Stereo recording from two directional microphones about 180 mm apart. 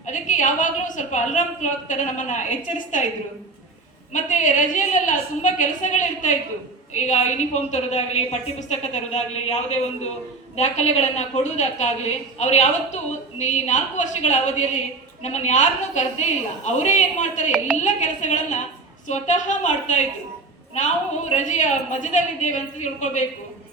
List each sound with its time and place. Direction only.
0.0 s a woman's voice: 45° left (ahead or behind)
4.1 s a woman's voice: 45° left (ahead or behind)